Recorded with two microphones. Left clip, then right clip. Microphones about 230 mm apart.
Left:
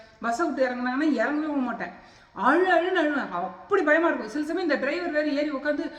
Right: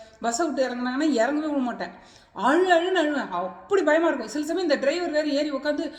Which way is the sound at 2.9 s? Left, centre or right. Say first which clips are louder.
Right 1 dB; centre.